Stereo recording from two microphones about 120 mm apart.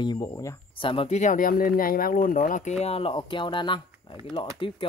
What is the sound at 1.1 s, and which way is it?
Speech, 80° left.